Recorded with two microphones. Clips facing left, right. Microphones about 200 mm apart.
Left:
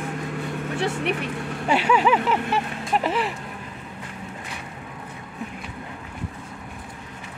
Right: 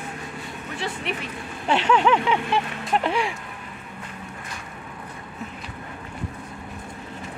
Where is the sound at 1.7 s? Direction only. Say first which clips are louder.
Even; 10° left (ahead or behind).